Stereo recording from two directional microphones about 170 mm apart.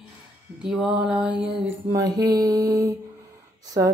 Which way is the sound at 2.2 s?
20° right (ahead or behind).